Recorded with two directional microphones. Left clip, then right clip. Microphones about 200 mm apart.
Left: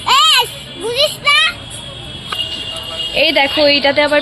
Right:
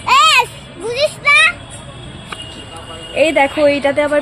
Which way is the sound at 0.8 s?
15° left (ahead or behind).